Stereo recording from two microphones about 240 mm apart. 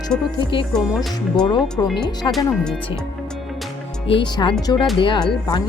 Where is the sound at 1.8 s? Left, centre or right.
Centre.